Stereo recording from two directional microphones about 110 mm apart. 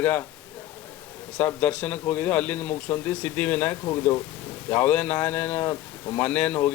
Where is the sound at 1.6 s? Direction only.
15° left (ahead or behind).